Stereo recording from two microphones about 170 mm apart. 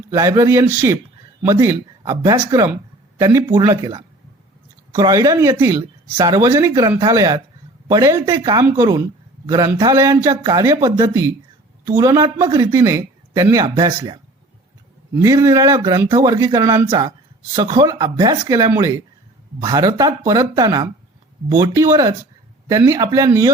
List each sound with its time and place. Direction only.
0.1 s speech: 20° right (ahead or behind)